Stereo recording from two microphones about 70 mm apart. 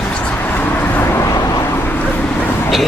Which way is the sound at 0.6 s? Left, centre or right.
Left.